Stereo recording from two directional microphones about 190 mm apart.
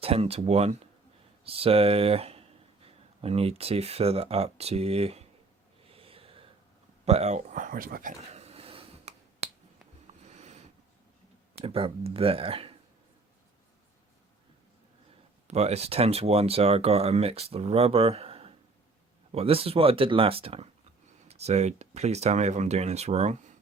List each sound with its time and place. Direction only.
0.0 s speech: 30° right (ahead or behind)
5.9 s a sound: 30° right (ahead or behind)
7.0 s speech: 35° right (ahead or behind)
8.3 s finger snapping: 35° right (ahead or behind)
10.2 s a sound: 35° right (ahead or behind)
11.6 s speech: 30° right (ahead or behind)
15.4 s speech: 35° right (ahead or behind)